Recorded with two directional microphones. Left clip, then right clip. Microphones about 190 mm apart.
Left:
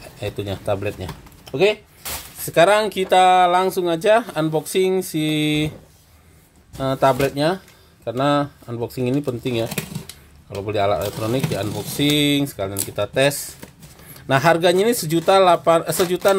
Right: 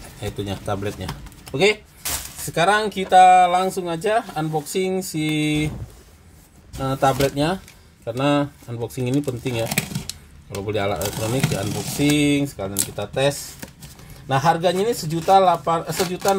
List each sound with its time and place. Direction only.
0.2 s speech: 25° left (ahead or behind)
2.4 s speech: 35° left (ahead or behind)
6.8 s speech: 20° left (ahead or behind)
10.7 s speech: 15° left (ahead or behind); by 16.3 s 40° left (ahead or behind)